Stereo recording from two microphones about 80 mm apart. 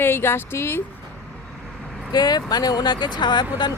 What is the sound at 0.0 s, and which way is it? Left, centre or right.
Speech, left.